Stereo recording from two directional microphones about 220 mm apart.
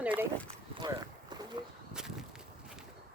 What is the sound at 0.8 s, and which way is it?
Boat, 20° right (ahead or behind).